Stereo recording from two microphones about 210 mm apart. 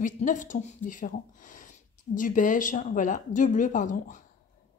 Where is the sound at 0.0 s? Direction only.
35° left (ahead or behind).